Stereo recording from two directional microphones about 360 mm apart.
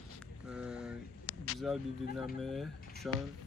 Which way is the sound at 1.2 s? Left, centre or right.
Right.